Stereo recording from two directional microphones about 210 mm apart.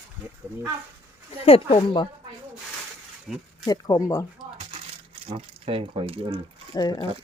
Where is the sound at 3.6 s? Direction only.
20° left (ahead or behind).